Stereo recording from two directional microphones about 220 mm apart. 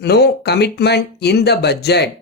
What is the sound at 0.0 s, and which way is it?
Speech, 50° left (ahead or behind).